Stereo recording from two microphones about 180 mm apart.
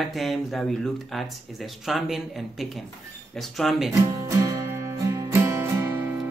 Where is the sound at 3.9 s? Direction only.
15° right (ahead or behind).